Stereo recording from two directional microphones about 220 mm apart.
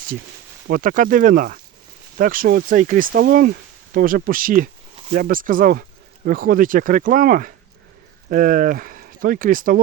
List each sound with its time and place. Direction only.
0.7 s speech: 40° right (ahead or behind)
4.9 s a sound: 30° right (ahead or behind)
5.2 s speech: 40° right (ahead or behind)